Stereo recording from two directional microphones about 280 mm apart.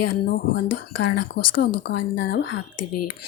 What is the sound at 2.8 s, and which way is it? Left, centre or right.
Speech, left.